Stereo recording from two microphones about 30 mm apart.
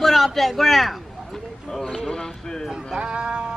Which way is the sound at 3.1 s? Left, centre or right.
Right.